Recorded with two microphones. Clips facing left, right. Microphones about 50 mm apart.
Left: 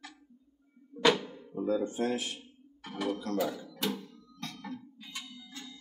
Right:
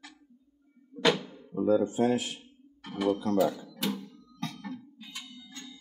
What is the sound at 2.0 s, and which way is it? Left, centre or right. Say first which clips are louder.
Music: right 5 dB; centre.